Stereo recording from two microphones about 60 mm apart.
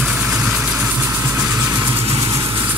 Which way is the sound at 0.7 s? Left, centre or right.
Right.